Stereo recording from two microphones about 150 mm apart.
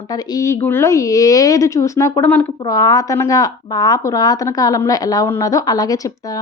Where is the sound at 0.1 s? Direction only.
25° left (ahead or behind).